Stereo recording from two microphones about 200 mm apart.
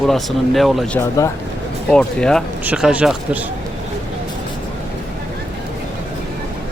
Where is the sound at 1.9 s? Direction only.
5° left (ahead or behind).